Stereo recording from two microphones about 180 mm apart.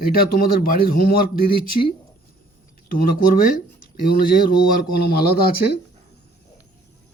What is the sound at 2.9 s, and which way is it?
Speech, 50° left (ahead or behind).